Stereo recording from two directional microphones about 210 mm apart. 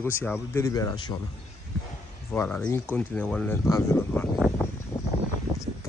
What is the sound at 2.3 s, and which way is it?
Speech, 10° left (ahead or behind).